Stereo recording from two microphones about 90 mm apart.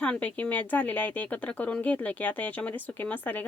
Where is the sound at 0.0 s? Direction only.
15° left (ahead or behind).